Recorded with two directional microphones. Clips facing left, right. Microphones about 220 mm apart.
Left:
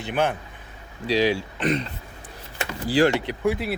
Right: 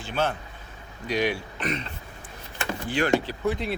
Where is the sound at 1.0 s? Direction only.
30° left (ahead or behind).